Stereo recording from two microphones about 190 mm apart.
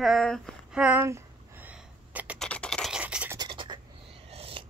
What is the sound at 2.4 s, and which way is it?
Scratch, 5° left (ahead or behind).